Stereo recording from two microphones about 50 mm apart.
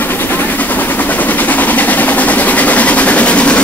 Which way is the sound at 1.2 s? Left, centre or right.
Left.